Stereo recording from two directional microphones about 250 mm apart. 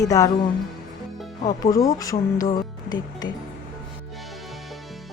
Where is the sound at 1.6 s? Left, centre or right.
Centre.